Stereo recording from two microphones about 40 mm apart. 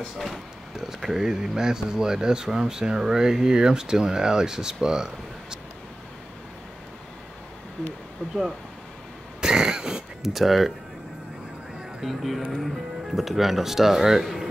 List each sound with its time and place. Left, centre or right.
0.7 s speech: centre
4.8 s a sound: centre
9.4 s throat clearing: centre
10.2 s speech: centre
12.0 s speech: centre